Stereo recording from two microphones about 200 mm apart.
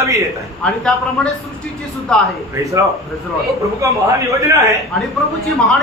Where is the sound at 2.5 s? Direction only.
15° right (ahead or behind).